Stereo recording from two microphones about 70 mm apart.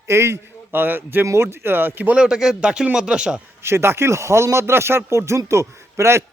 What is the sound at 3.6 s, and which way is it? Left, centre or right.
Speech, right.